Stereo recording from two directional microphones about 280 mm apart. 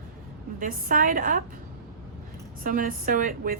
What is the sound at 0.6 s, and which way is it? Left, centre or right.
Speech, right.